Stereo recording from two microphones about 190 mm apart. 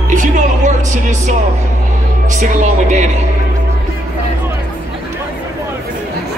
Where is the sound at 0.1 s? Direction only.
40° right (ahead or behind).